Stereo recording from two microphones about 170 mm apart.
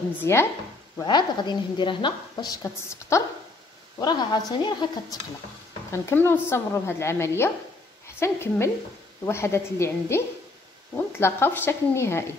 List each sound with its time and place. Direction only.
0.2 s speech: 15° left (ahead or behind)
0.9 s a woman's voice: 25° left (ahead or behind)